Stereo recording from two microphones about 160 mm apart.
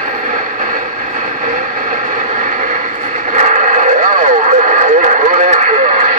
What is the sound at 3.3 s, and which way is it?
Radio, 50° right (ahead or behind).